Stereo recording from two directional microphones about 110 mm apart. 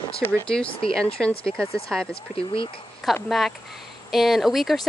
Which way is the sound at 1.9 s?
5° right (ahead or behind).